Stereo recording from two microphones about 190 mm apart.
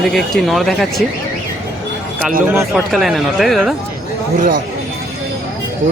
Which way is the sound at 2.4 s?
10° right (ahead or behind).